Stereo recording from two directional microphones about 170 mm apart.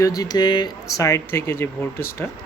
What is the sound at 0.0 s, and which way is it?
Speech, 20° left (ahead or behind).